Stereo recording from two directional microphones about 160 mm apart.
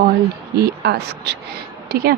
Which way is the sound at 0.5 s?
85° right.